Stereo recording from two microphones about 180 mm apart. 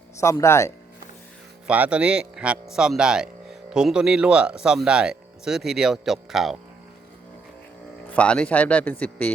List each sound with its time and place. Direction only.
0.2 s a man's voice: 15° left (ahead or behind)
1.6 s speech: 5° right (ahead or behind)
8.1 s a man's voice: 5° left (ahead or behind)